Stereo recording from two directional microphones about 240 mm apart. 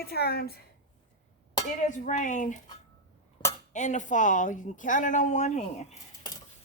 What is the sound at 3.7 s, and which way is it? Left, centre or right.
Speech, left.